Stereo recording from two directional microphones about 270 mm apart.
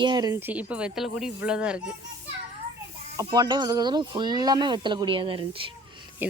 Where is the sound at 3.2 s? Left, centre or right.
Centre.